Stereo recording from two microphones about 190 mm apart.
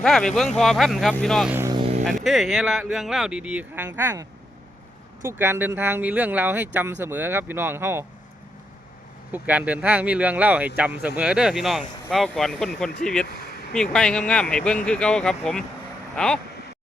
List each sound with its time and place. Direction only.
0.0 s speech: 5° left (ahead or behind)
1.5 s vehicle: 15° right (ahead or behind)
2.0 s speech: centre (ahead or behind)
9.3 s speech: 5° right (ahead or behind)